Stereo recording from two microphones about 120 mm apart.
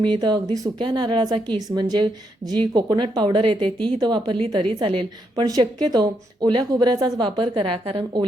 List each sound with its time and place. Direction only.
0.0 s speech: 40° right (ahead or behind)